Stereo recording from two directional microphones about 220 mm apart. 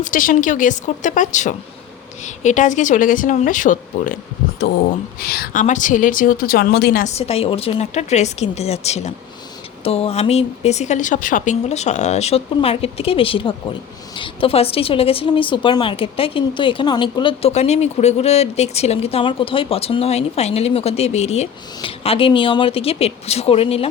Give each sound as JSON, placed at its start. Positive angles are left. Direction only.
{"t": 0.0, "sound": "speech", "side_deg": 40}
{"t": 7.2, "sound": "a woman's voice", "side_deg": 25}